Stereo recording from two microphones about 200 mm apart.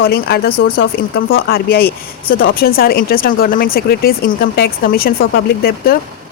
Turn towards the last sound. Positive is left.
turn(degrees=50)  # may be behind; listen again after turning